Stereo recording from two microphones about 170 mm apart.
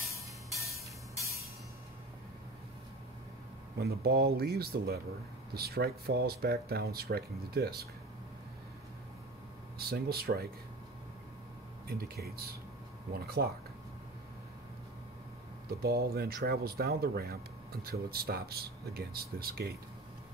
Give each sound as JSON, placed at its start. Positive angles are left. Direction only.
{"t": 3.7, "sound": "speech", "side_deg": -65}
{"t": 9.8, "sound": "speech", "side_deg": -65}
{"t": 12.0, "sound": "speech", "side_deg": -65}
{"t": 15.8, "sound": "speech", "side_deg": -65}